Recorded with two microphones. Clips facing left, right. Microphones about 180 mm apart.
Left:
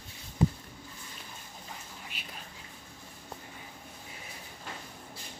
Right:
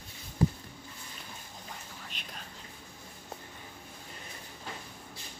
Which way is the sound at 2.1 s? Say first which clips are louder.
Even; 5° left (ahead or behind).